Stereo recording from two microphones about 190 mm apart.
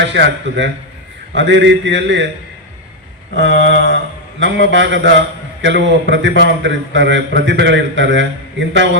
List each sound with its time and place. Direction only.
0.0 s a man's voice: 70° right (ahead or behind)
3.3 s a man's voice: 70° right (ahead or behind)